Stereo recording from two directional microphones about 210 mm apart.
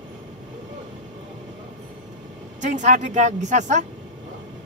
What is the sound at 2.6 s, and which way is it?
Speech, 35° right (ahead or behind).